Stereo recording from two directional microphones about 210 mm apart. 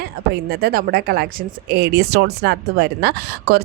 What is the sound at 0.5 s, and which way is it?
Speech, 50° right (ahead or behind).